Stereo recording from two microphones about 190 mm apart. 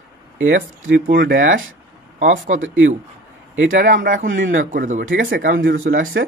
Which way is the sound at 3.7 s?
45° right (ahead or behind).